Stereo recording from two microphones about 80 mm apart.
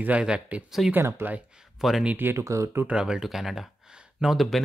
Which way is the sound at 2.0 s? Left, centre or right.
Right.